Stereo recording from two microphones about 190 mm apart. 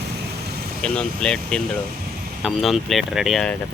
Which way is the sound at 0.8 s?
5° left (ahead or behind).